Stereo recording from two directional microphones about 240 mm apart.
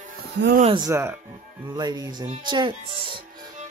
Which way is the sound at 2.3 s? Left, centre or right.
Centre.